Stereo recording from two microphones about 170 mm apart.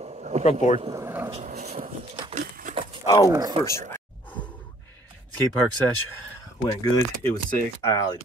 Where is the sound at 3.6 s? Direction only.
15° left (ahead or behind).